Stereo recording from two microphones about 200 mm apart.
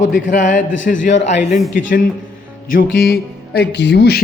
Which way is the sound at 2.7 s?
50° left (ahead or behind).